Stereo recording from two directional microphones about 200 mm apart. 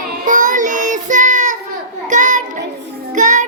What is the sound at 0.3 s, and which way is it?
Child singing, 40° right (ahead or behind).